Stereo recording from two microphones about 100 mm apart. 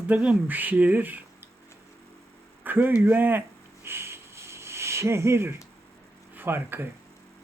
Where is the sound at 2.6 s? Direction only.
20° right (ahead or behind).